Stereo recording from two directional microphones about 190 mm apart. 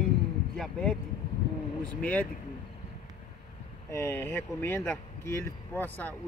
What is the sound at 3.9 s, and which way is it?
Speech, 10° left (ahead or behind).